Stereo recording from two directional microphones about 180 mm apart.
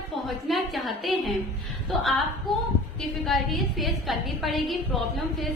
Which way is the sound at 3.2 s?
Centre (ahead or behind).